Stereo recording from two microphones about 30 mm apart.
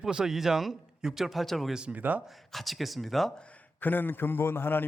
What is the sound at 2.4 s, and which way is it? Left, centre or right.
Speech, centre.